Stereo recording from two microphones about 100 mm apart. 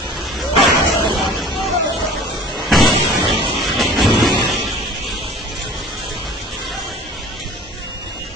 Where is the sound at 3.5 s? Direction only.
Centre (ahead or behind).